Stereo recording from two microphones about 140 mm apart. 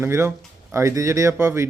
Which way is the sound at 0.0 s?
15° right (ahead or behind).